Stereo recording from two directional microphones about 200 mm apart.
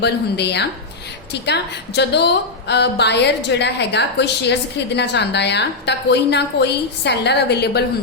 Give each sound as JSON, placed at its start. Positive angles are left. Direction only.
{"t": 0.0, "sound": "a woman's voice", "side_deg": 55}